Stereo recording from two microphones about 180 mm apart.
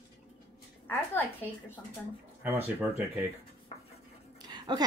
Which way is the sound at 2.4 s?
10° right (ahead or behind).